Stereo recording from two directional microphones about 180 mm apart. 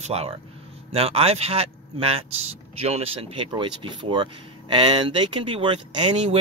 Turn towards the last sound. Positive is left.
turn(degrees=-25)  # may be behind; listen again after turning